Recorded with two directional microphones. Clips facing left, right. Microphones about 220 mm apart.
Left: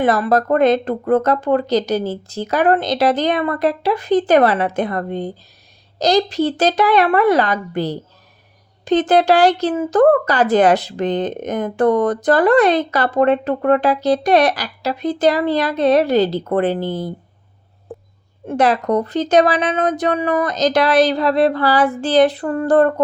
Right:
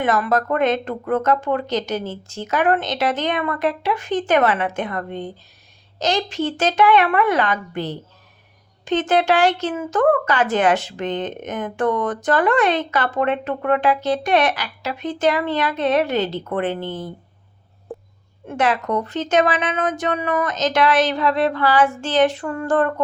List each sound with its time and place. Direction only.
0.0 s speech: 35° left (ahead or behind)
18.4 s speech: 35° left (ahead or behind)